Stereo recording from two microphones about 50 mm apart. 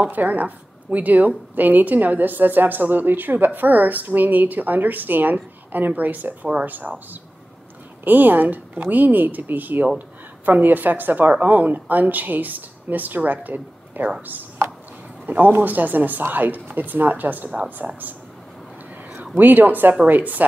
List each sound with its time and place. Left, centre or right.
0.0 s a woman's voice: right
8.0 s a woman's voice: right
19.3 s a woman's voice: right